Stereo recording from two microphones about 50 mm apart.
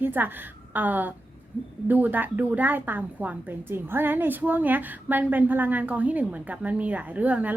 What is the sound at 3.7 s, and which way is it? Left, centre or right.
A woman's voice, right.